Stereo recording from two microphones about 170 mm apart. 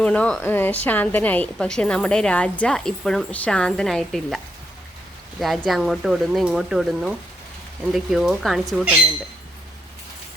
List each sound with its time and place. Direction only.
0.0 s a woman's voice: 5° left (ahead or behind)
5.4 s a woman's voice: centre (ahead or behind)